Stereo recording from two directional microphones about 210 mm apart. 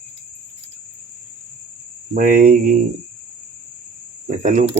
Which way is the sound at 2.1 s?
40° right (ahead or behind).